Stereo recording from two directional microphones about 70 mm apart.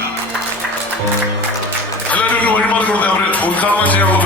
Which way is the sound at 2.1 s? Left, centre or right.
Left.